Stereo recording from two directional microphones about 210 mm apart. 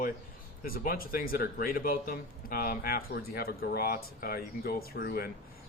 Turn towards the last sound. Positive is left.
turn(degrees=45)  # may be behind; listen again after turning